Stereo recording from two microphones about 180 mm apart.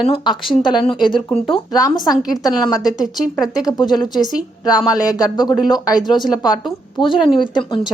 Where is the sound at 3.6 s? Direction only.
20° left (ahead or behind).